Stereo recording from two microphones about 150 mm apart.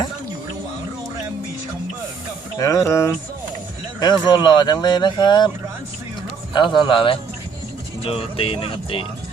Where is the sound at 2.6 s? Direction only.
20° left (ahead or behind).